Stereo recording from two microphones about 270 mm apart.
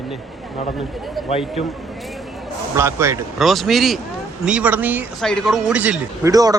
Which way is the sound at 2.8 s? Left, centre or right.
Centre.